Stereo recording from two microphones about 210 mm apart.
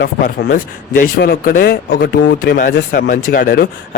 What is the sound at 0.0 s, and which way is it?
Speech, 45° left (ahead or behind).